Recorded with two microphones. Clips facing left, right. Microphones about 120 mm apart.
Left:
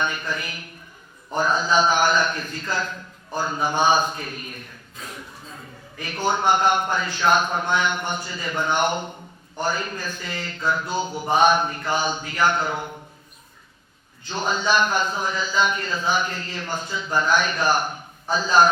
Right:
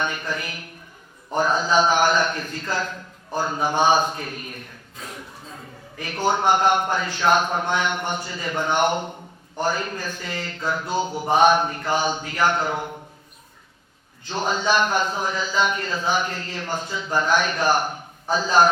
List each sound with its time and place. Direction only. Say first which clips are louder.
0.0 s a man's voice: even; 55° right (ahead or behind)
3.8 s a man's voice: right 1 dB; 60° right (ahead or behind); by 5.6 s 35° right (ahead or behind)
6.0 s a man's voice: right 1 dB; 50° right (ahead or behind)
11.0 s a sound: right 2 dB; 10° right (ahead or behind)
11.3 s a man's voice: right 1 dB; 60° right (ahead or behind)
11.6 s speech: right 1 dB; 45° right (ahead or behind)
14.3 s a man's voice: right 1 dB; 60° right (ahead or behind)